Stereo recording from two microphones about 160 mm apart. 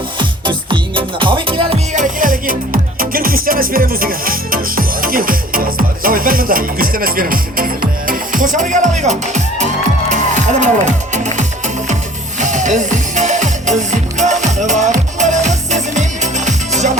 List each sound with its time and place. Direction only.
0.2 s music: 30° right (ahead or behind)
1.9 s music: 55° right (ahead or behind)